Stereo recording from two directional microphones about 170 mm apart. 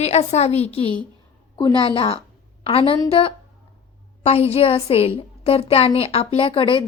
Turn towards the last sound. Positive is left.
turn(degrees=30)  # may be behind; listen again after turning